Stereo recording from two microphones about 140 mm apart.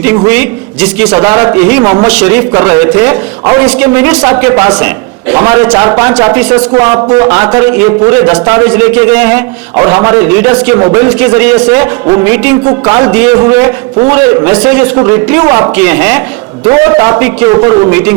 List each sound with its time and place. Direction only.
0.0 s a man's voice: 15° right (ahead or behind)
1.8 s a man's voice: 25° right (ahead or behind)
2.0 s a man's voice: 10° right (ahead or behind)
10.8 s a man's voice: 25° right (ahead or behind)
12.6 s a man's voice: 25° right (ahead or behind)
16.6 s a man's voice: 25° right (ahead or behind)
17.5 s a man's voice: 30° right (ahead or behind)